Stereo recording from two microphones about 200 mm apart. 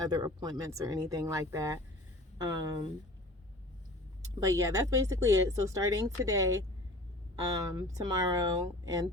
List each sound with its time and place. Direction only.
0.0 s speech: 20° right (ahead or behind)
4.4 s speech: 15° right (ahead or behind)
7.5 s speech: 20° right (ahead or behind)